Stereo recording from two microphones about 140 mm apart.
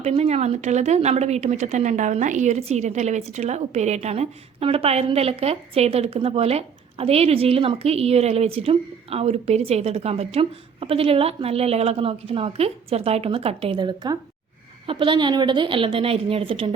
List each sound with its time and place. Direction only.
0.0 s speech: 50° right (ahead or behind)
13.7 s a woman's voice: 30° right (ahead or behind)